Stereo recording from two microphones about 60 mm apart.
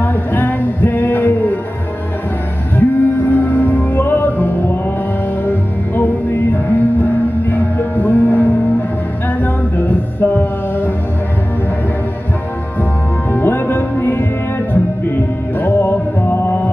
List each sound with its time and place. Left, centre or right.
0.0 s music: left
2.7 s music: left
13.3 s music: left
15.6 s music: left